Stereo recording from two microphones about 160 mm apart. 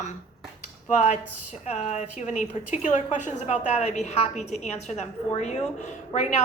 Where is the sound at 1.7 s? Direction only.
45° left (ahead or behind).